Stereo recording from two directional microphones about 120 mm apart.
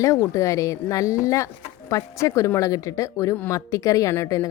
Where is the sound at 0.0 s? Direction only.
25° left (ahead or behind).